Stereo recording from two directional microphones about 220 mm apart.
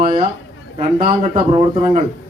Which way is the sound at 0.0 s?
25° right (ahead or behind).